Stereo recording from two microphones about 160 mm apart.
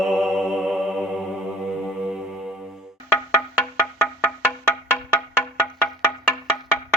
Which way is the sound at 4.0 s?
10° left (ahead or behind).